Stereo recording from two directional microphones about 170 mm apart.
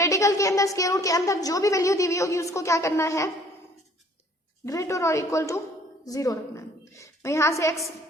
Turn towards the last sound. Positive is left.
turn(degrees=20)  # may be behind; listen again after turning